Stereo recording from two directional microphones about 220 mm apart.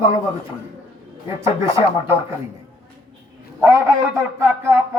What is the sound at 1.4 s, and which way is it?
Speech, 10° right (ahead or behind).